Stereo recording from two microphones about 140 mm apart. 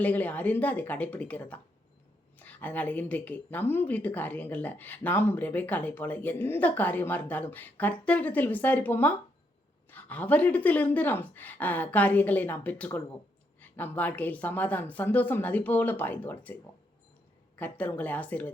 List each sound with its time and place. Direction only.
0.0 s a woman's voice: 10° left (ahead or behind)
17.6 s a woman's voice: 10° left (ahead or behind)